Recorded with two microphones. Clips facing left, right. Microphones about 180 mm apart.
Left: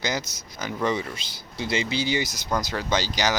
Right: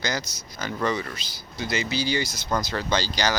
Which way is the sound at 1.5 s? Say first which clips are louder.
Left 1 dB; 25° left (ahead or behind).